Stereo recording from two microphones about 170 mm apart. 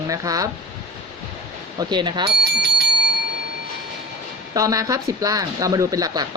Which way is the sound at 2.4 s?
75° right (ahead or behind).